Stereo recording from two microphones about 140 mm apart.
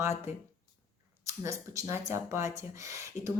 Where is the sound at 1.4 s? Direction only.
20° right (ahead or behind).